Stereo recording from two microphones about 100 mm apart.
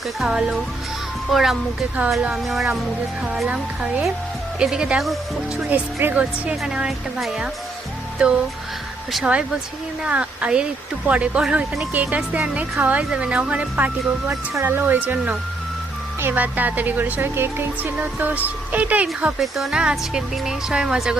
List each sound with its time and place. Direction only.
0.2 s music: 10° right (ahead or behind)
1.3 s speech: 5° right (ahead or behind)
3.2 s music: 5° right (ahead or behind)
5.6 s music: 15° right (ahead or behind)
6.6 s speech: 5° right (ahead or behind)
8.2 s music: 10° right (ahead or behind)
19.4 s speech: 5° right (ahead or behind)